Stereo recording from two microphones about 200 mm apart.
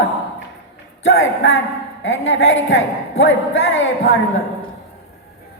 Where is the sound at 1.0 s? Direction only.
70° left (ahead or behind).